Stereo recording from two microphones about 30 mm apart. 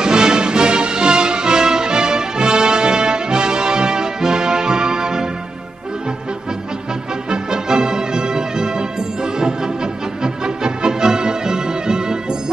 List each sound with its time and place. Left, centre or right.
0.0 s music: right
7.2 s music: right